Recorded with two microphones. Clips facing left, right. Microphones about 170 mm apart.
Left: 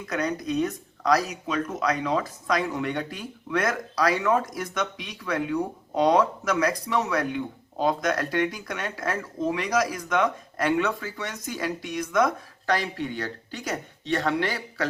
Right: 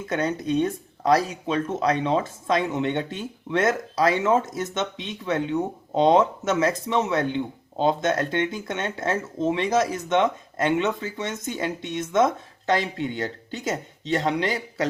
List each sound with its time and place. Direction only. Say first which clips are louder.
0.0 s speech: right 2 dB; 25° right (ahead or behind)